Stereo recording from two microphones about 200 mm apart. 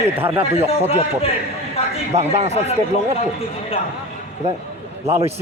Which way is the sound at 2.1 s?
35° right (ahead or behind).